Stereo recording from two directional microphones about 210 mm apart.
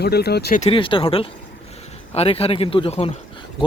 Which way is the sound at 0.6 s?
25° left (ahead or behind).